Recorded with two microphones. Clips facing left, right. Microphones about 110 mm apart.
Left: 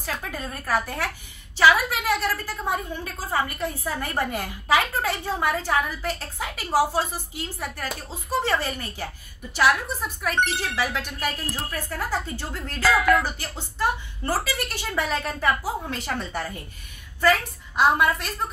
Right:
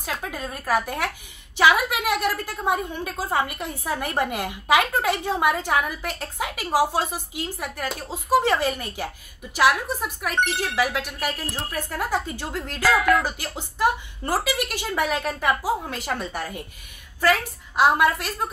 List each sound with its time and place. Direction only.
0.0 s a woman's voice: 10° right (ahead or behind)
12.1 s a woman's voice: 15° right (ahead or behind)
12.8 s a woman's voice: centre (ahead or behind)
13.4 s a woman's voice: 15° right (ahead or behind)